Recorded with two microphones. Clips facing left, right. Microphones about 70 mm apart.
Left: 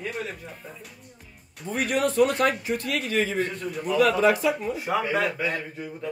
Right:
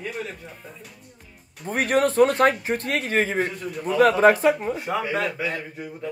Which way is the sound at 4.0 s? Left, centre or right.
Right.